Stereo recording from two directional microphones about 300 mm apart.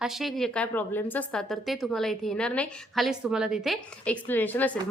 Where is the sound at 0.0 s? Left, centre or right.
Centre.